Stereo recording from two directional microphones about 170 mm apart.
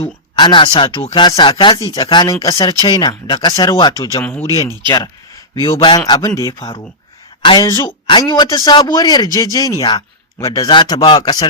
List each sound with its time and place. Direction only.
0.0 s speech: 30° left (ahead or behind); by 4.5 s 10° left (ahead or behind)
4.6 s speech: 20° right (ahead or behind)
6.1 s speech: 20° left (ahead or behind)